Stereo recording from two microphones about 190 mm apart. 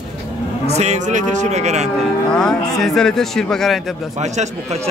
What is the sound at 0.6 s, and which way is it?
A man's voice, 35° right (ahead or behind).